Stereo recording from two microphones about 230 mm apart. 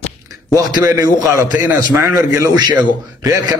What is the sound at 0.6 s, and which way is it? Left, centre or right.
A man's voice, centre.